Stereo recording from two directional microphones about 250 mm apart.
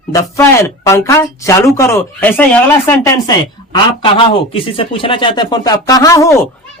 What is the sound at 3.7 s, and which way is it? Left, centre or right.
Speech, centre.